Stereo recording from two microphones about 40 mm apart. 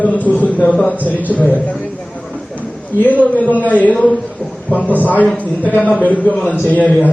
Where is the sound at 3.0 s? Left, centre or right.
Left.